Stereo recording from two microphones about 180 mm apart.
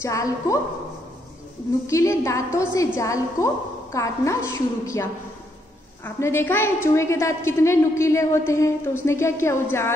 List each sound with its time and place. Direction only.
0.0 s a woman's voice: 15° left (ahead or behind)
1.9 s a woman's voice: 15° left (ahead or behind)
6.0 s a woman's voice: 15° left (ahead or behind)